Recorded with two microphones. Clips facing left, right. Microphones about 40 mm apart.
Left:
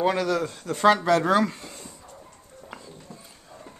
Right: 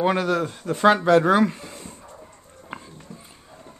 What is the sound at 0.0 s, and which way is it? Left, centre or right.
Speech, right.